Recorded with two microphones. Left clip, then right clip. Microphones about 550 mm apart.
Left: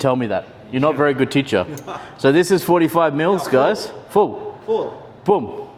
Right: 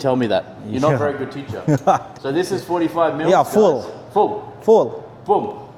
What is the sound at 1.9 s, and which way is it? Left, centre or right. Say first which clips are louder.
Speech: right 15 dB; right.